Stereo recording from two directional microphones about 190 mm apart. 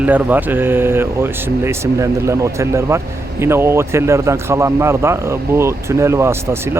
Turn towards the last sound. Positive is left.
turn(degrees=-15)  # may be behind; listen again after turning